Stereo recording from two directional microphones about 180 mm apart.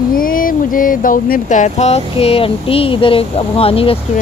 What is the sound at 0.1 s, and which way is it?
Speech, 50° left (ahead or behind).